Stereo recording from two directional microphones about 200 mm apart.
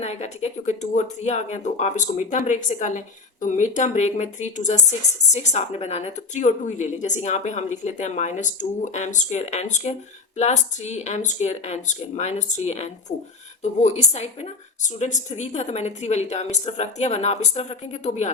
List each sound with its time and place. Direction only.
0.0 s speech: 35° left (ahead or behind)